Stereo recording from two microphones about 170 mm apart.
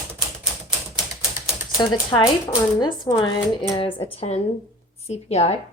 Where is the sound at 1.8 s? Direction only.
25° left (ahead or behind).